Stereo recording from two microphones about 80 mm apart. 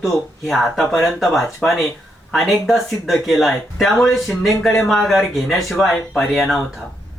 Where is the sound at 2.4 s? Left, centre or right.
Centre.